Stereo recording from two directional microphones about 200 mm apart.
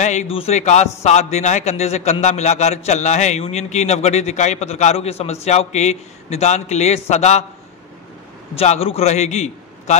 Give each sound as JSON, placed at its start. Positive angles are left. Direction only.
{"t": 0.0, "sound": "a man's voice", "side_deg": 35}
{"t": 8.5, "sound": "a man's voice", "side_deg": 30}